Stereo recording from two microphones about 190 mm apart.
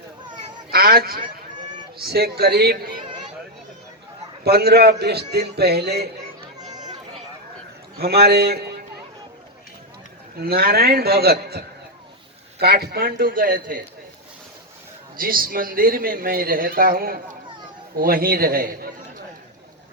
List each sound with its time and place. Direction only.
0.7 s a man's voice: 50° right (ahead or behind)
4.4 s a man's voice: 55° right (ahead or behind)
6.6 s chatter: 20° right (ahead or behind)
7.9 s a man's voice: 55° right (ahead or behind)
10.4 s a man's voice: 55° right (ahead or behind)
15.1 s speech: 50° right (ahead or behind)